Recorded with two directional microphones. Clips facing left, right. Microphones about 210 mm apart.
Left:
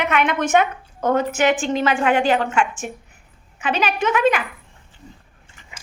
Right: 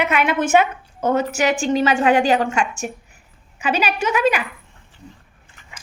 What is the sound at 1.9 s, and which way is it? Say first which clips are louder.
Speech: right 1 dB; 40° right (ahead or behind).